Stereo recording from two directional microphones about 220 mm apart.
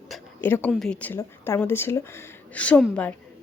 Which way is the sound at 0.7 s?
5° left (ahead or behind).